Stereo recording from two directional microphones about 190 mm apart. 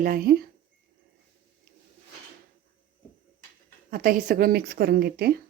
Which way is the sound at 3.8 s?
45° right (ahead or behind).